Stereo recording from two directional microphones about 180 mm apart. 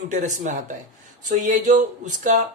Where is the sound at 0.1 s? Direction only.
45° right (ahead or behind).